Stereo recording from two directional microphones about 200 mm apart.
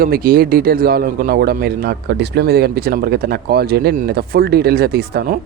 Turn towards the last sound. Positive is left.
turn(degrees=-50)  # may be behind; listen again after turning